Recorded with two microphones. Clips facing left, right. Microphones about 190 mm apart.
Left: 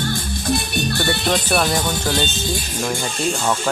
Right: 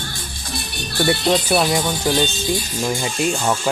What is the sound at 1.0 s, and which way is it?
Speech, 20° right (ahead or behind).